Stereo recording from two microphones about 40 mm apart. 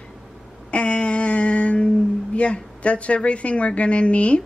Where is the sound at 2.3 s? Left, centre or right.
Left.